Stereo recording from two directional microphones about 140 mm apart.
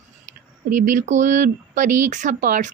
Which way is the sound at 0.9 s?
60° right (ahead or behind).